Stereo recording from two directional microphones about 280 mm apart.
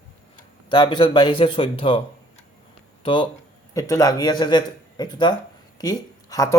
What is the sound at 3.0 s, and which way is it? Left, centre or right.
Speech, centre.